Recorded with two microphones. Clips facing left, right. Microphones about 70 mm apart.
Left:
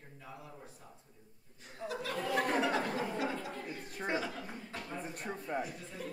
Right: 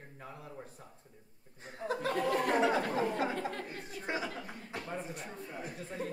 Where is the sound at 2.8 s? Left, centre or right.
Right.